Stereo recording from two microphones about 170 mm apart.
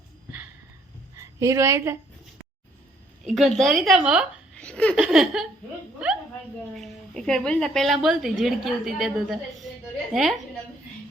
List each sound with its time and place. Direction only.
1.1 s a woman's voice: 20° right (ahead or behind)
3.2 s a woman's voice: centre (ahead or behind)
4.5 s laughter: 5° left (ahead or behind)
4.9 s a woman's voice: 5° right (ahead or behind)
6.0 s a sound: 5° right (ahead or behind)
6.8 s a woman's voice: 5° left (ahead or behind)